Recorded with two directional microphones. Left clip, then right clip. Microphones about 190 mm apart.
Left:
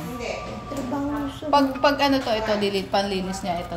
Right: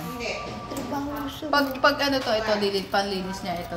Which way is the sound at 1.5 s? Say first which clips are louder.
Left 2 dB; 20° left (ahead or behind).